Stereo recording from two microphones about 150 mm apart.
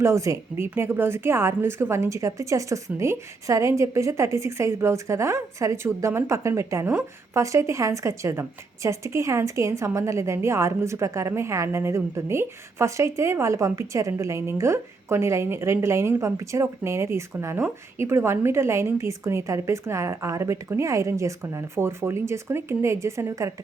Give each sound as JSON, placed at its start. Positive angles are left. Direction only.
{"t": 0.0, "sound": "a woman's voice", "side_deg": -20}